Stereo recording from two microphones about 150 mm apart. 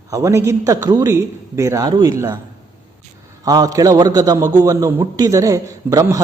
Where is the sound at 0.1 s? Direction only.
20° right (ahead or behind).